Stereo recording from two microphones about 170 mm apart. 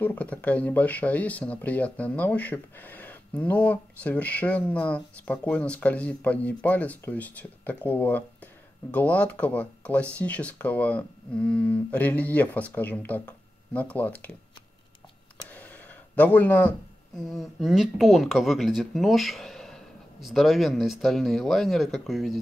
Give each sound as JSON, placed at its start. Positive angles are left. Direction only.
{"t": 0.0, "sound": "speech", "side_deg": 10}
{"t": 15.5, "sound": "a sound", "side_deg": 10}
{"t": 17.2, "sound": "speech", "side_deg": 0}